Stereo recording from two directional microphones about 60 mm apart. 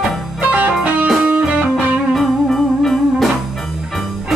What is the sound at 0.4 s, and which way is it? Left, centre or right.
Music, right.